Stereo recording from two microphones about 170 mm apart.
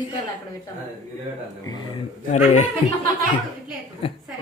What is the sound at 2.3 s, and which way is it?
Speech, 45° left (ahead or behind).